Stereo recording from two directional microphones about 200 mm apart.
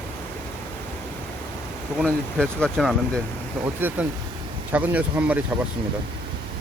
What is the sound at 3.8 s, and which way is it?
Speech, 10° right (ahead or behind).